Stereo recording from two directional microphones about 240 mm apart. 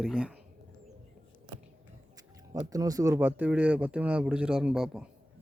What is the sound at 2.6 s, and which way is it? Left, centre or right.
Speech, centre.